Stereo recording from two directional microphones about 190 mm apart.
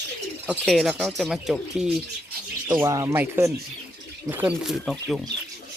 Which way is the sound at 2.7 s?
15° right (ahead or behind).